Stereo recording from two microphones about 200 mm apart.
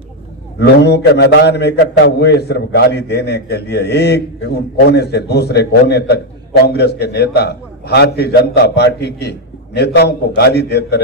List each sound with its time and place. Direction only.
0.6 s a man's voice: 55° left (ahead or behind)